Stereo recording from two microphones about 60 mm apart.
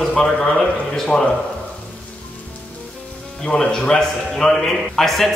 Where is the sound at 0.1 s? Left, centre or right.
Centre.